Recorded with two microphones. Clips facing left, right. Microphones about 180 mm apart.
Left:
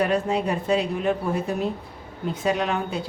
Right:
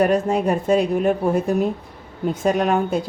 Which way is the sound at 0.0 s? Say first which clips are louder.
Right 5 dB; 45° right (ahead or behind).